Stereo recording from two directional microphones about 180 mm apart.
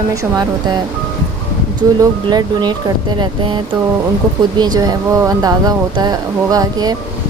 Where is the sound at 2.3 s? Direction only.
25° right (ahead or behind).